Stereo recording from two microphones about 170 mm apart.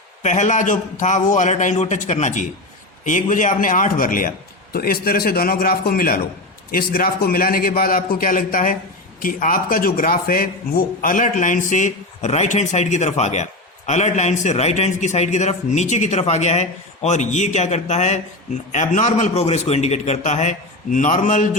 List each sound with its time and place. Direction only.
0.2 s a man's voice: 45° left (ahead or behind)